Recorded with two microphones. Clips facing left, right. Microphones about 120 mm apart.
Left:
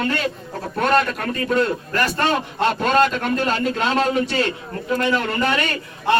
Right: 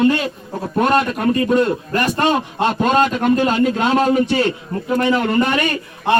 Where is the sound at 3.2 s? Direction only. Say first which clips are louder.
Right 6 dB; 15° right (ahead or behind).